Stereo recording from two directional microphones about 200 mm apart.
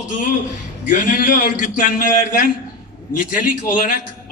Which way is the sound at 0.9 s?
40° left (ahead or behind).